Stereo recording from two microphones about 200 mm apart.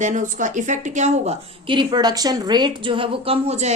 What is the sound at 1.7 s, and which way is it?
A woman's voice, 25° right (ahead or behind).